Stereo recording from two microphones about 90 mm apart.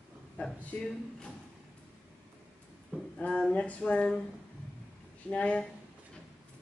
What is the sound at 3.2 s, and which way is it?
Speech, 15° left (ahead or behind).